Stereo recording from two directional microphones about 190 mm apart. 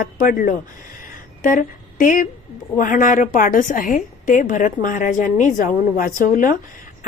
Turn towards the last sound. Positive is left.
turn(degrees=45)  # may be behind; listen again after turning